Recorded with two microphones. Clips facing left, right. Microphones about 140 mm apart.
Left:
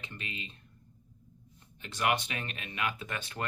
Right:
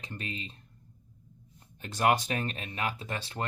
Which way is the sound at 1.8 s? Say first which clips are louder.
Right 4 dB; 40° right (ahead or behind).